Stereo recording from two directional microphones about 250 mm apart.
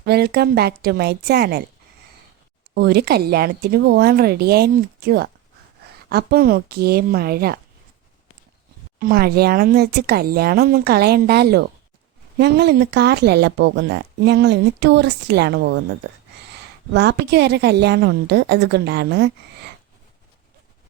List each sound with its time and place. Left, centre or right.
0.0 s speech: right
2.7 s speech: right
9.0 s speech: right